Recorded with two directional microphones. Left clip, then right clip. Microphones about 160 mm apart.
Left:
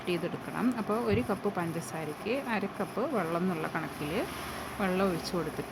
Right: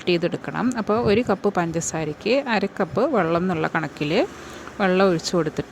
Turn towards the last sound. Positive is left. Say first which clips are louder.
# right 11 dB
turn(degrees=-45)  # may be behind; listen again after turning